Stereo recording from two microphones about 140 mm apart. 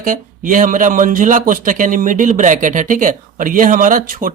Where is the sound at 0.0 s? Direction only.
70° right (ahead or behind).